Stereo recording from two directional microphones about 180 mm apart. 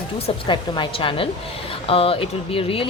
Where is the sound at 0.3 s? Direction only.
25° left (ahead or behind).